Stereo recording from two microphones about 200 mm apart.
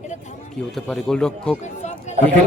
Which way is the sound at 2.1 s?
35° left (ahead or behind).